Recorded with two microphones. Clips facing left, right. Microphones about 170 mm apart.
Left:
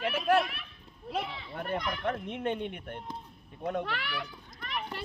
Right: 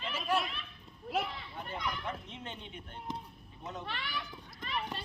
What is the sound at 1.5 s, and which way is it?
Speech, 65° left (ahead or behind).